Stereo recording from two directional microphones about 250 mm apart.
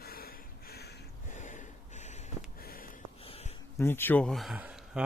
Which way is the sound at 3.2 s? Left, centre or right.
Left.